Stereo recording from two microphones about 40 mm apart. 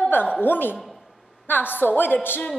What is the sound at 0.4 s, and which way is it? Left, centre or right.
A woman's voice, left.